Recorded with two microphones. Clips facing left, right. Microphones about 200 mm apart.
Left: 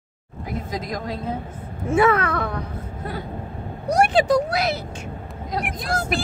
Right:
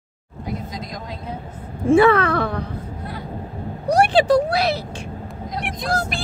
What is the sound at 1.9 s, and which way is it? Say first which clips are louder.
Speech: right 5 dB; 30° right (ahead or behind).